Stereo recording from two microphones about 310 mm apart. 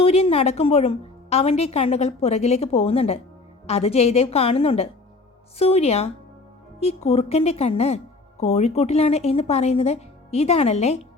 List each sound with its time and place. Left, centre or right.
0.0 s a woman's voice: centre